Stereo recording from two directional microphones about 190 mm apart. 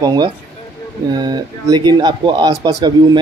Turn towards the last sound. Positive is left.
turn(degrees=-20)  # may be behind; listen again after turning